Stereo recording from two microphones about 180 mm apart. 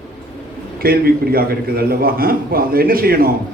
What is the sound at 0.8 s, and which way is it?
Speech, 55° right (ahead or behind).